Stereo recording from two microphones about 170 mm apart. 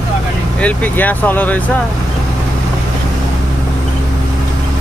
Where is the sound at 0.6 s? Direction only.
10° left (ahead or behind).